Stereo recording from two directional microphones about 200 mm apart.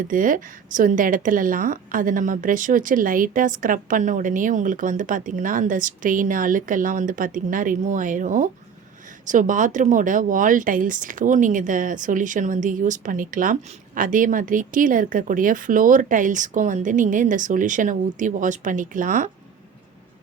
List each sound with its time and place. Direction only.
0.1 s speech: 40° right (ahead or behind)